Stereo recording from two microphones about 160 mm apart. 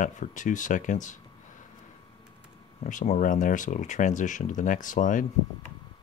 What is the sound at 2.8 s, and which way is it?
Speech, 55° left (ahead or behind).